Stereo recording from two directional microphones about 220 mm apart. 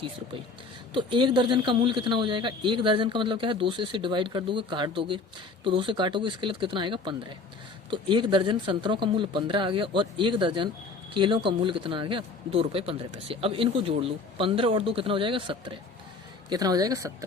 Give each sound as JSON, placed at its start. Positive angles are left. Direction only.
{"t": 0.9, "sound": "a woman's voice", "side_deg": -20}